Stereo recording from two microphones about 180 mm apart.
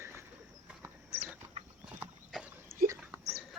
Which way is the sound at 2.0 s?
10° right (ahead or behind).